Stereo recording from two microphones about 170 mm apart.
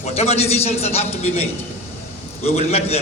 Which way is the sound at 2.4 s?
40° left (ahead or behind).